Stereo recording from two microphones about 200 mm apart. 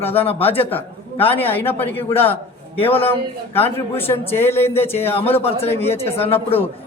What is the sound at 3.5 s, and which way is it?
A man's voice, 10° left (ahead or behind).